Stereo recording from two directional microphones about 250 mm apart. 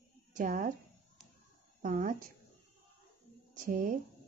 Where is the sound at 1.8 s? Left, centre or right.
Right.